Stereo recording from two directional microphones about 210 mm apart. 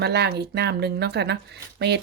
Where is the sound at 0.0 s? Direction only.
50° right (ahead or behind).